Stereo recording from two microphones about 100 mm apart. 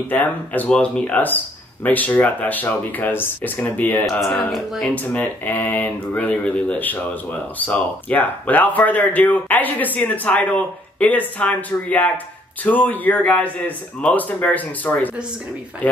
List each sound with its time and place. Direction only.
0.1 s speech: 15° left (ahead or behind)
4.0 s speech: centre (ahead or behind)
4.9 s speech: 20° left (ahead or behind)